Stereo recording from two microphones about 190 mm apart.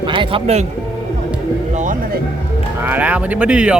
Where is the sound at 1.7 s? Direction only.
40° right (ahead or behind).